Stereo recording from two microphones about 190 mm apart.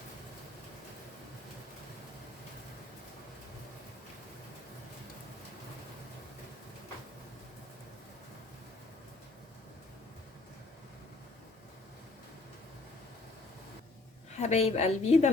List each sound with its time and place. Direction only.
14.3 s a woman's voice: 35° left (ahead or behind)